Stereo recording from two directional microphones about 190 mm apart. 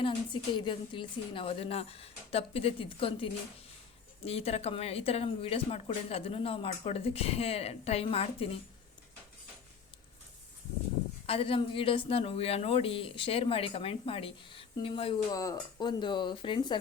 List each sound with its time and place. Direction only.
0.0 s speech: 25° left (ahead or behind)
11.3 s speech: 30° left (ahead or behind)